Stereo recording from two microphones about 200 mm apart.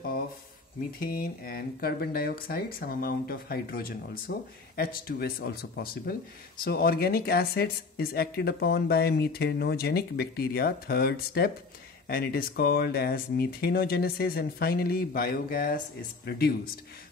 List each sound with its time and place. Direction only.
0.9 s speech: 45° left (ahead or behind)